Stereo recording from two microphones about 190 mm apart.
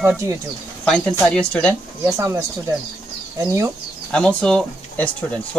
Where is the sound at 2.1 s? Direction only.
15° right (ahead or behind).